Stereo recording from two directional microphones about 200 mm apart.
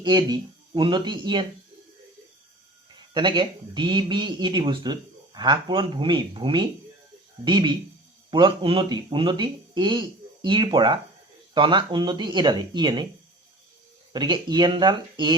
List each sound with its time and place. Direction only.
0.0 s speech: 20° right (ahead or behind)
3.2 s speech: 20° right (ahead or behind)
14.1 s speech: 20° right (ahead or behind)